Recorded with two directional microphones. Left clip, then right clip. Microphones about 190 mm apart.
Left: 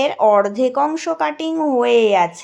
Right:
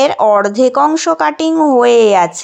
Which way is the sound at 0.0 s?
25° right (ahead or behind).